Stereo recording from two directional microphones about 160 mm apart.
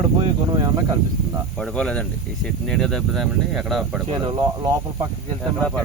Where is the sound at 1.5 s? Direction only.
5° left (ahead or behind).